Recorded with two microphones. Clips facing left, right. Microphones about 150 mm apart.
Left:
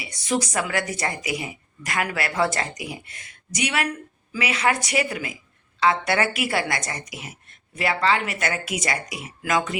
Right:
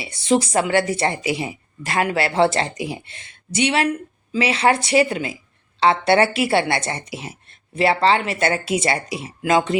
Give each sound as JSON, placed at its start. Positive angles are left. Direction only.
{"t": 0.0, "sound": "speech", "side_deg": -30}